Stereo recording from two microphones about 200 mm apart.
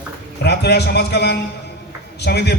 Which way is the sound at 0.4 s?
55° left (ahead or behind).